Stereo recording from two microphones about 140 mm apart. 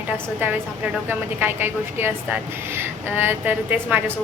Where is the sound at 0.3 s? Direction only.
15° right (ahead or behind).